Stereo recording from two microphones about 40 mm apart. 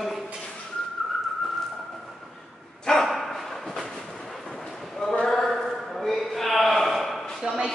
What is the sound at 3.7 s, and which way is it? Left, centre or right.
Train, centre.